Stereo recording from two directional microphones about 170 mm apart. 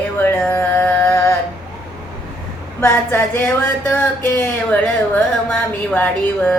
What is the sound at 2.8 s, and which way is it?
Speech, 15° left (ahead or behind).